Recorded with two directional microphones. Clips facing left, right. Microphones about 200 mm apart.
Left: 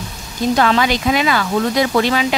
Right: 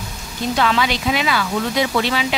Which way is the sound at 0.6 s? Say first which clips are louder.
Left 2 dB; 45° left (ahead or behind).